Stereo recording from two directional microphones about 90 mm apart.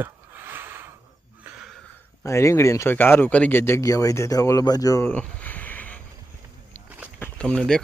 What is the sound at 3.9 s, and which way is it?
Speech, 40° left (ahead or behind).